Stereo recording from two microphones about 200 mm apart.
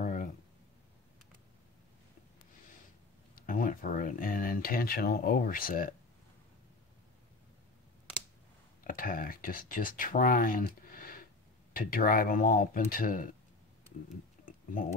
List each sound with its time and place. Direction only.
0.0 s a sound: 40° left (ahead or behind)
3.3 s speech: 40° left (ahead or behind)
8.8 s speech: 45° left (ahead or behind)